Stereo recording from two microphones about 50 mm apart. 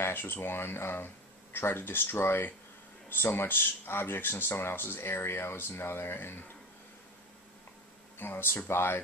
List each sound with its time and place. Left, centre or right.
0.0 s speech: left
8.2 s speech: left